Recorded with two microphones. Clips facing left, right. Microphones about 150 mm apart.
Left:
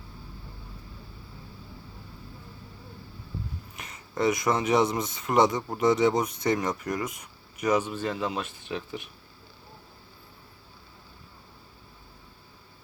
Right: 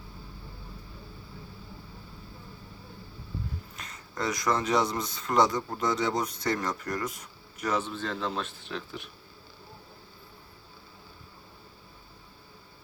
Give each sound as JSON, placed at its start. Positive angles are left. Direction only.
{"t": 3.8, "sound": "speech", "side_deg": 20}
{"t": 6.9, "sound": "speech", "side_deg": 5}
{"t": 7.6, "sound": "speech", "side_deg": 15}